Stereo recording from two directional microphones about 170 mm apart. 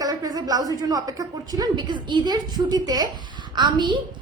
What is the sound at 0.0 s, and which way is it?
Speech, 20° right (ahead or behind).